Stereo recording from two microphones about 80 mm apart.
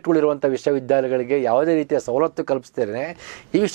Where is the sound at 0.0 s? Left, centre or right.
Centre.